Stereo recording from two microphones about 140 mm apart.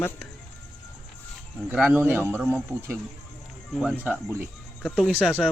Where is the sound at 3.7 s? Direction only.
10° right (ahead or behind).